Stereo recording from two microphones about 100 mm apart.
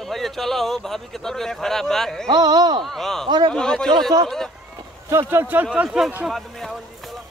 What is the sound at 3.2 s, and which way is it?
Speech, 50° right (ahead or behind).